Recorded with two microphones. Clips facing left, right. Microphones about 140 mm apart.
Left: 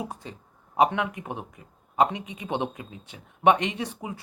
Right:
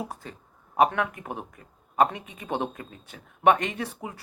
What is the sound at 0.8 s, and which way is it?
Speech, 15° left (ahead or behind).